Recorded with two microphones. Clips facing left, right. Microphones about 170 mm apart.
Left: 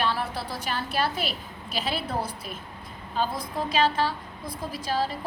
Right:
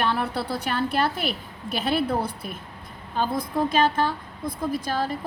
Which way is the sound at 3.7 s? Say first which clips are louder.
Even; 50° right (ahead or behind).